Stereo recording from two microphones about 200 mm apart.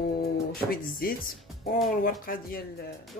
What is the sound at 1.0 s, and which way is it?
Speech, 45° left (ahead or behind).